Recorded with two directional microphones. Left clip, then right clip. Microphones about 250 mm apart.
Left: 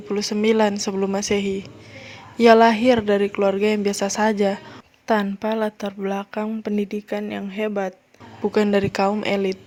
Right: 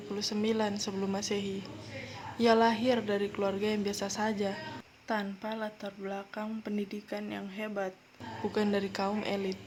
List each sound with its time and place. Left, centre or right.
0.1 s speech: left